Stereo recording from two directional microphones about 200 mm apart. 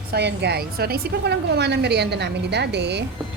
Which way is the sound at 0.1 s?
55° right (ahead or behind).